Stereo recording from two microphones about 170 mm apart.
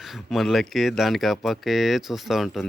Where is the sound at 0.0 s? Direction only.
Centre (ahead or behind).